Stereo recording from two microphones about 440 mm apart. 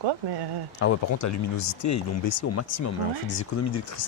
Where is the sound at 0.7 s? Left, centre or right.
Left.